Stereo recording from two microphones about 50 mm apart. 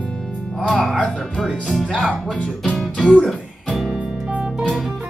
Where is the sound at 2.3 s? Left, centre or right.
Centre.